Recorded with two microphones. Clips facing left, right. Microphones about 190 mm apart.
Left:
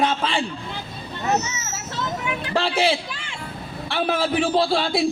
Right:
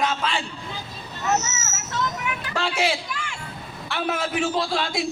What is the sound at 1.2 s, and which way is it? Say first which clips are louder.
Hubbub: left 1 dB; 30° left (ahead or behind).